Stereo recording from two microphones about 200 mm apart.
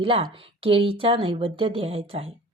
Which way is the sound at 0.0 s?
25° right (ahead or behind).